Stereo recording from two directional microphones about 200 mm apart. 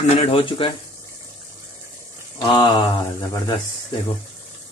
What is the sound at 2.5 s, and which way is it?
Speech, 20° left (ahead or behind).